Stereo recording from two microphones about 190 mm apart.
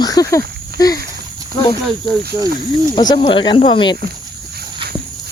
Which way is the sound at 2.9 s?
25° left (ahead or behind).